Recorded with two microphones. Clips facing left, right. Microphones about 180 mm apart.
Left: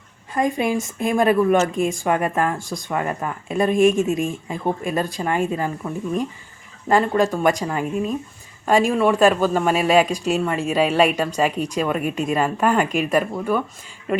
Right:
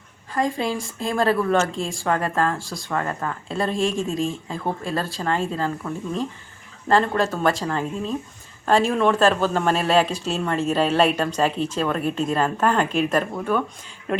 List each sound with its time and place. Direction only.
0.3 s speech: 20° left (ahead or behind); by 14.2 s 5° left (ahead or behind)